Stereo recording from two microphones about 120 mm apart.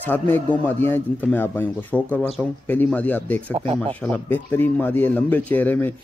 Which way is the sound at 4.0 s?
15° left (ahead or behind).